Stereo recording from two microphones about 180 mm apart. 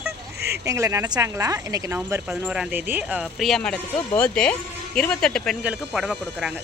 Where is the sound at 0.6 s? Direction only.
15° right (ahead or behind).